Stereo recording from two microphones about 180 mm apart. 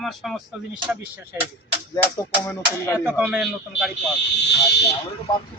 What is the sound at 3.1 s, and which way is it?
Speech, 5° right (ahead or behind).